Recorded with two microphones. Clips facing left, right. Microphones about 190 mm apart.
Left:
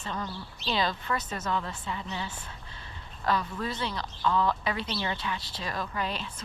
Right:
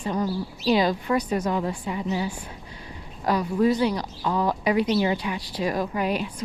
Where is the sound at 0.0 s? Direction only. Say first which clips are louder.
Right 10 dB; 15° right (ahead or behind).